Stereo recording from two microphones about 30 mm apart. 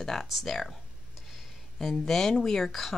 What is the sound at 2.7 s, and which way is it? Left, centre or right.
Speech, centre.